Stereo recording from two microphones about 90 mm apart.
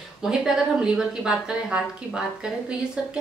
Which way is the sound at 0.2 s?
5° right (ahead or behind).